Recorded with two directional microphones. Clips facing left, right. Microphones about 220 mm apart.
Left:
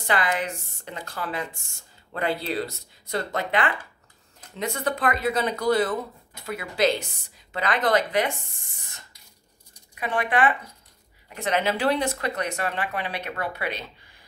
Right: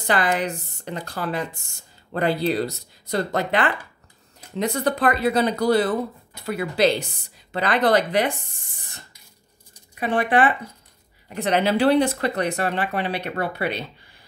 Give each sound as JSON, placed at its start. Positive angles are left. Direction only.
{"t": 0.0, "sound": "speech", "side_deg": -35}
{"t": 9.9, "sound": "speech", "side_deg": -30}